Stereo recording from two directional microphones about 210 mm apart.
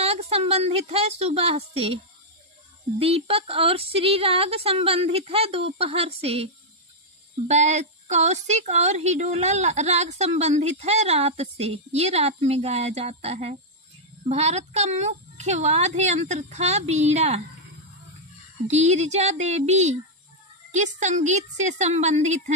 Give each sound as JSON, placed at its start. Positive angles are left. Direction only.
{"t": 0.0, "sound": "speech", "side_deg": -30}
{"t": 3.0, "sound": "a woman's voice", "side_deg": -25}
{"t": 18.7, "sound": "a woman's voice", "side_deg": -30}